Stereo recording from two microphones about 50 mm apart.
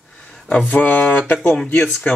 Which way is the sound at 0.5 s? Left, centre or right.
Left.